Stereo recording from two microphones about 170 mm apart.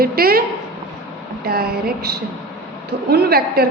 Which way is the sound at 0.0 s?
60° right (ahead or behind).